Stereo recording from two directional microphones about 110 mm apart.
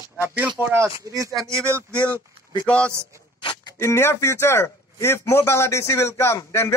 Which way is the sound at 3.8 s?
25° left (ahead or behind).